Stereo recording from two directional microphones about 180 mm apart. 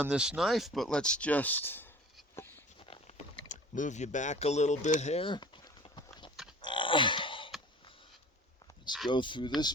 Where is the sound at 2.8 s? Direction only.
35° left (ahead or behind).